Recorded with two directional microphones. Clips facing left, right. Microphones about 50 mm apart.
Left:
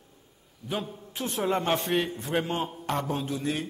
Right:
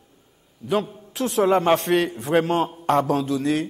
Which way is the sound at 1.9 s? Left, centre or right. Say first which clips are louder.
Right 7 dB; right.